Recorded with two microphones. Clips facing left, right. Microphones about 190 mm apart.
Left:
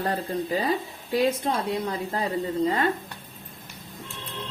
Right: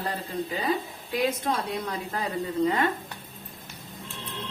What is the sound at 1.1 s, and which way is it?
A woman's voice, 25° left (ahead or behind).